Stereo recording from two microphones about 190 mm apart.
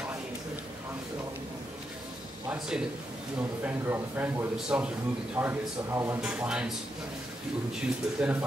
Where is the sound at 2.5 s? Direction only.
5° right (ahead or behind).